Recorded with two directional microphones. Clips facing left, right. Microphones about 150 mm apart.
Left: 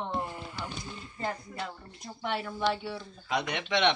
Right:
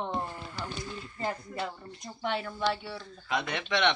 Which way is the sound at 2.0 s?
Centre (ahead or behind).